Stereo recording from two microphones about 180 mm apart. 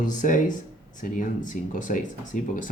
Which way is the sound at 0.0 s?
45° left (ahead or behind).